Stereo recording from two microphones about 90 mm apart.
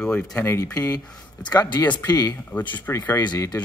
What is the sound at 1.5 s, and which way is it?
Speech, 55° left (ahead or behind).